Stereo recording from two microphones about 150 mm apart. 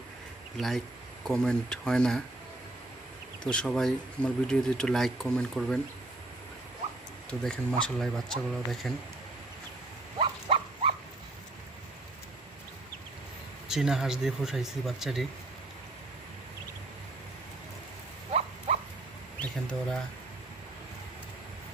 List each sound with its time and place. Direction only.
0.5 s speech: centre (ahead or behind)
3.4 s speech: 5° left (ahead or behind)
7.3 s speech: 5° left (ahead or behind)
10.2 s a sound: 35° right (ahead or behind)
13.7 s speech: 5° right (ahead or behind)
18.3 s a sound: 45° right (ahead or behind)